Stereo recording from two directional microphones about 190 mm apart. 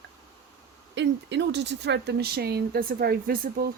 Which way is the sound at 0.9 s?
70° right (ahead or behind).